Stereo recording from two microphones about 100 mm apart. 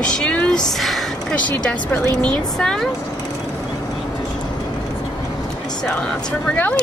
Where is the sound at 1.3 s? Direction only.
15° left (ahead or behind).